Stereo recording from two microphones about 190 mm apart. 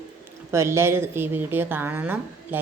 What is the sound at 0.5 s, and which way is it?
A woman's voice, 15° right (ahead or behind).